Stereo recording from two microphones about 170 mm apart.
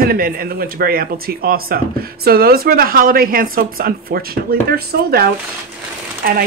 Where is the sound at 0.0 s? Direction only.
60° right (ahead or behind).